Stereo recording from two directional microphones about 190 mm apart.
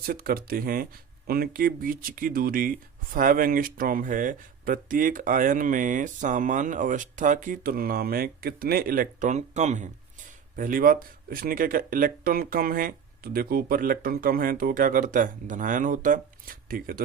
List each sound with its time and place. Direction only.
0.0 s speech: 50° right (ahead or behind)